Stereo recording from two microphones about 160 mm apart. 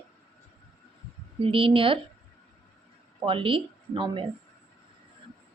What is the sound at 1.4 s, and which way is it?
Speech, 35° right (ahead or behind).